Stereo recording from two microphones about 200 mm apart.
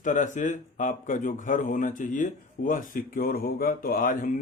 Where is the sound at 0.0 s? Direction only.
40° left (ahead or behind).